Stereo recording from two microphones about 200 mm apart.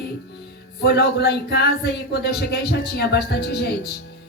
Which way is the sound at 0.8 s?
55° left (ahead or behind).